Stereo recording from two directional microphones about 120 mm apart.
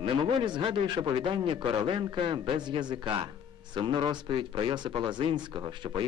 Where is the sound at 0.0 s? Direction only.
45° right (ahead or behind).